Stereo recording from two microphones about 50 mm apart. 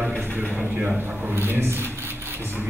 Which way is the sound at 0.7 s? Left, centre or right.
Right.